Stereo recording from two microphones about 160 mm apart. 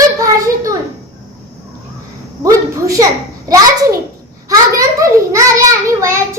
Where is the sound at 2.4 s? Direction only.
20° right (ahead or behind).